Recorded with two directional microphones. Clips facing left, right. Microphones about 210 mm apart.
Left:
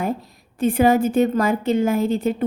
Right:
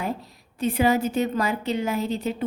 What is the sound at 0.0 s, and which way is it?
A woman's voice, 50° left (ahead or behind).